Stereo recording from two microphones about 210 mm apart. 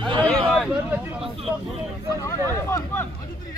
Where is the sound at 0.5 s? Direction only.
Centre (ahead or behind).